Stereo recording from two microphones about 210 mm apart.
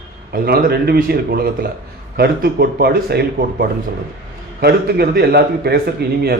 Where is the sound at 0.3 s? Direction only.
45° right (ahead or behind).